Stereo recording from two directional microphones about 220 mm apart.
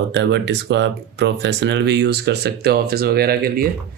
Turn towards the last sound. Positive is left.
turn(degrees=-40)  # may be behind; listen again after turning